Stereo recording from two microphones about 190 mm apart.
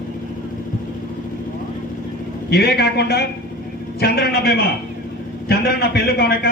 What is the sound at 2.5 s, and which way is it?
A man's voice, 55° left (ahead or behind).